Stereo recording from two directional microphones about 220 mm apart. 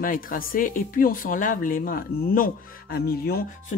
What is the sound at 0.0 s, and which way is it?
Speech, 40° left (ahead or behind).